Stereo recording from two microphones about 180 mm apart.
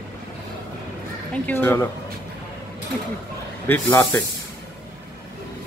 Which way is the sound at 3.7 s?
15° left (ahead or behind).